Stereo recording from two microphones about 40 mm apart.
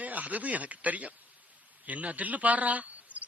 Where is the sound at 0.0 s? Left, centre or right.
Right.